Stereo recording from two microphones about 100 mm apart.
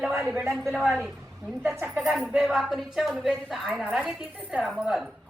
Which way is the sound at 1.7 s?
20° right (ahead or behind).